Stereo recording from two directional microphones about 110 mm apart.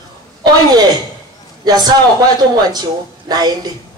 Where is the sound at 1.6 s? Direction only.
40° right (ahead or behind).